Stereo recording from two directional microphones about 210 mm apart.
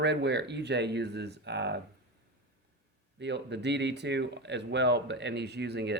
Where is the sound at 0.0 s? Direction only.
55° right (ahead or behind).